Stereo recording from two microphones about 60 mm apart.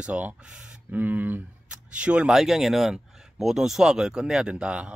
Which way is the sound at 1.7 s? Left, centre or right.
Centre.